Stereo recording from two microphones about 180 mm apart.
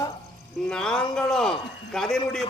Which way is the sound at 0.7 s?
5° left (ahead or behind).